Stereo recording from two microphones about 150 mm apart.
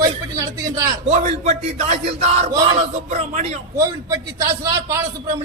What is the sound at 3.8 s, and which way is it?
A man's voice, 20° right (ahead or behind).